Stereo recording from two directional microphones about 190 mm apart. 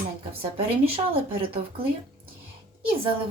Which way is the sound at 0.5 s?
30° right (ahead or behind).